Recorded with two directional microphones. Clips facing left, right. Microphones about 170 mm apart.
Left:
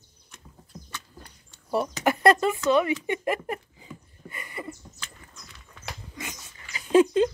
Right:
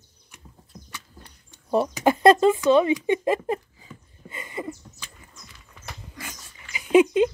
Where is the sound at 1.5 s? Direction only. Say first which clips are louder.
Right 4 dB; 20° right (ahead or behind).